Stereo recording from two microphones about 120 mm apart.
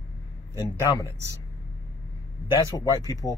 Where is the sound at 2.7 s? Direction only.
30° left (ahead or behind).